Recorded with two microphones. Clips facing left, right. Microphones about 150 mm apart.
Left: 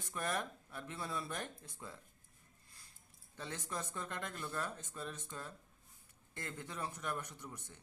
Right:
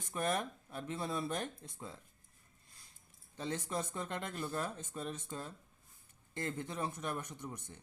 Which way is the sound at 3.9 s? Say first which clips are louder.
Right 4 dB; 15° right (ahead or behind).